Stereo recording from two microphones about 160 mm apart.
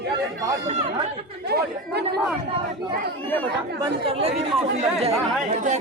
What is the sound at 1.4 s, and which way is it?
Speech, 90° right.